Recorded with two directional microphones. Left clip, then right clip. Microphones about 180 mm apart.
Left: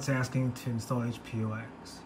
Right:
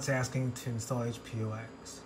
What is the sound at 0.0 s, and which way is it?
Speech, centre (ahead or behind).